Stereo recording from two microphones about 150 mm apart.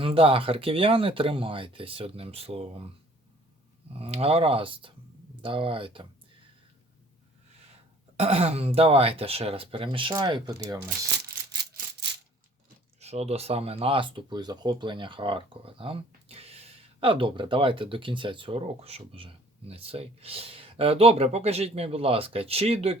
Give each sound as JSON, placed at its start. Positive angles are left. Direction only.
{"t": 0.0, "sound": "speech", "side_deg": -35}
{"t": 3.9, "sound": "speech", "side_deg": -40}
{"t": 7.7, "sound": "speech", "side_deg": -45}
{"t": 13.0, "sound": "speech", "side_deg": -45}